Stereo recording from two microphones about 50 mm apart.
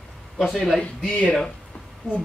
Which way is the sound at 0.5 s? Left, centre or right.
Centre.